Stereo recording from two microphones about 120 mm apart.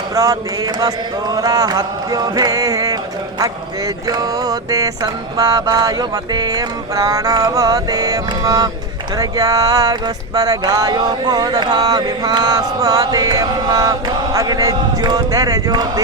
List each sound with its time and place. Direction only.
0.1 s speech: 30° right (ahead or behind)
4.1 s speech: 30° right (ahead or behind)